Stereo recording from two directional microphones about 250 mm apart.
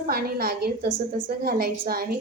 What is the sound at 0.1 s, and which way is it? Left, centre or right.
Child singing, right.